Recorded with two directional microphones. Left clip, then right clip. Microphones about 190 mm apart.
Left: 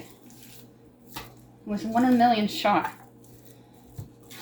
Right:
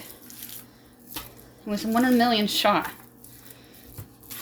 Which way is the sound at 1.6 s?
70° right (ahead or behind).